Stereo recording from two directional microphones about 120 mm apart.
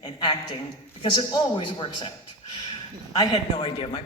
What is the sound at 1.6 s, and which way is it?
Speech, 40° left (ahead or behind).